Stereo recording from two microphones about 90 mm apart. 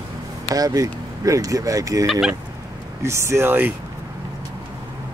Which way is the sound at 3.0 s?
30° right (ahead or behind).